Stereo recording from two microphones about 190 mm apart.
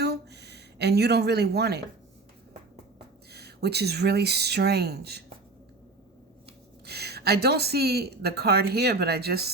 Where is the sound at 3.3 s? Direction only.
60° right (ahead or behind).